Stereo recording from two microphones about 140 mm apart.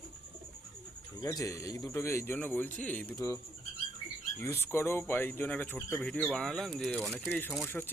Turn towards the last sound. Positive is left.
turn(degrees=10)  # may be behind; listen again after turning